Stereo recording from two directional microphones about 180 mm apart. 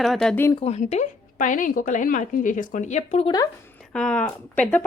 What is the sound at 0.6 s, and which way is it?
A woman's voice, 40° left (ahead or behind).